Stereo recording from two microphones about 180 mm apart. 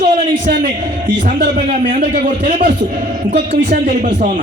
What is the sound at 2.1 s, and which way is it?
A man's voice, 45° right (ahead or behind).